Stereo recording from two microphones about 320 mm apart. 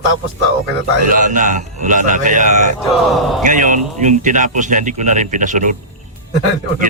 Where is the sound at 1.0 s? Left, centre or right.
Right.